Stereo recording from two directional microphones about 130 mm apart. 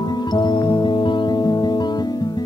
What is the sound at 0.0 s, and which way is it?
Music, 35° left (ahead or behind).